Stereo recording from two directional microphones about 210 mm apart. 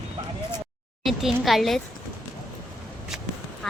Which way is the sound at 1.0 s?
Centre (ahead or behind).